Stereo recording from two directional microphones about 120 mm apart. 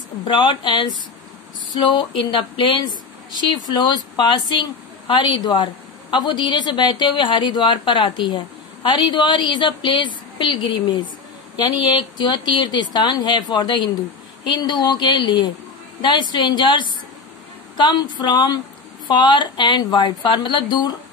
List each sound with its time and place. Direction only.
0.3 s a woman's voice: 45° left (ahead or behind)